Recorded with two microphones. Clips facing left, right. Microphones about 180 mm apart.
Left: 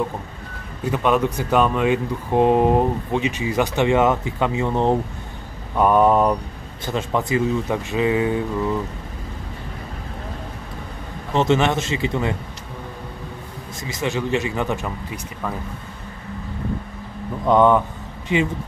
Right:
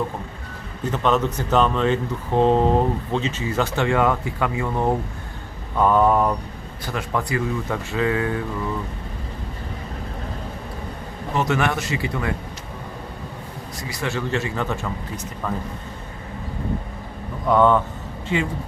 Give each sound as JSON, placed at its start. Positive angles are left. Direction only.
{"t": 0.9, "sound": "speech", "side_deg": 10}
{"t": 11.3, "sound": "speech", "side_deg": 25}
{"t": 13.8, "sound": "speech", "side_deg": 20}
{"t": 17.5, "sound": "speech", "side_deg": 15}